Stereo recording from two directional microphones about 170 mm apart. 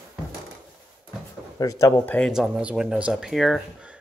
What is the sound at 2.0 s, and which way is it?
Speech, 10° left (ahead or behind).